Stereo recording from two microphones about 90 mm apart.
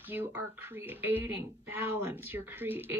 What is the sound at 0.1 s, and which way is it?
Speech, 25° right (ahead or behind).